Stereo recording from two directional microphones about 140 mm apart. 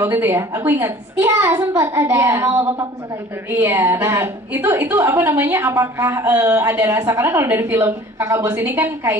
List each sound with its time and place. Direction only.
0.0 s a woman's voice: 15° right (ahead or behind)